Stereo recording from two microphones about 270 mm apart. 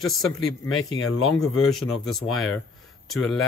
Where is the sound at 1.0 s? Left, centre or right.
Left.